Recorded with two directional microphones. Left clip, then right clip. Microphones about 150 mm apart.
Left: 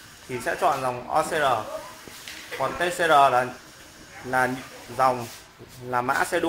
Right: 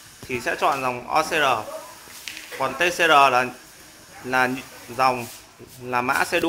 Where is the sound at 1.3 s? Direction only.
25° left (ahead or behind).